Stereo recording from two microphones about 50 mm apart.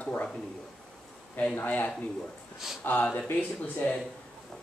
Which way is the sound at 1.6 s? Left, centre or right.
Left.